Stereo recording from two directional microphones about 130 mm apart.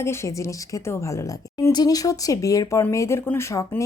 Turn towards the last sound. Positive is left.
turn(degrees=20)  # may be behind; listen again after turning